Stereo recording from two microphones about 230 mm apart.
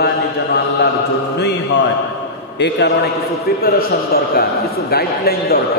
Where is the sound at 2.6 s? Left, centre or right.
Left.